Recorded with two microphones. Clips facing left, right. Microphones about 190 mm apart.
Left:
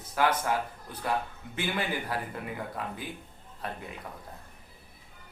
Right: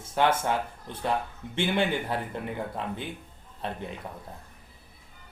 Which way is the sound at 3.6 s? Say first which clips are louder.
Right 3 dB; 25° right (ahead or behind).